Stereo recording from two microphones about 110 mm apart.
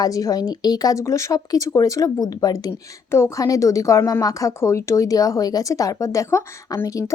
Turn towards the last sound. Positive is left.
turn(degrees=30)  # may be behind; listen again after turning